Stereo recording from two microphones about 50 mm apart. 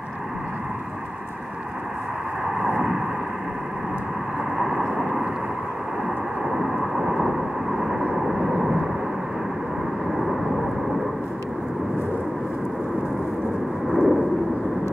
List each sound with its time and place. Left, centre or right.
2.6 s vehicle: centre
4.6 s vehicle: centre
6.4 s vehicle: centre
10.1 s vehicle: centre
13.8 s vehicle: centre